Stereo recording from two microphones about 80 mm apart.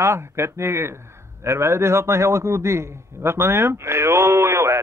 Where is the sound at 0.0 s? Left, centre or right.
Right.